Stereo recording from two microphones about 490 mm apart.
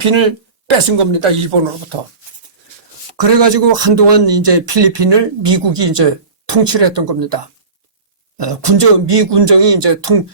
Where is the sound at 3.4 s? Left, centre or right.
Right.